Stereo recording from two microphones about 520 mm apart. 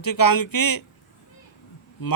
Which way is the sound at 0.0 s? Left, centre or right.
Left.